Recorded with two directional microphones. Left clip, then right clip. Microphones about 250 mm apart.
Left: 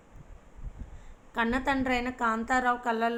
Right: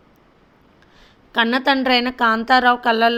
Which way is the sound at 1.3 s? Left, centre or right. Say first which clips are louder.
Right 11 dB; right.